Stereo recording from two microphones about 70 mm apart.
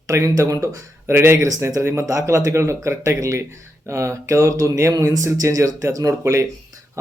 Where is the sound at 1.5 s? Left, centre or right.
Right.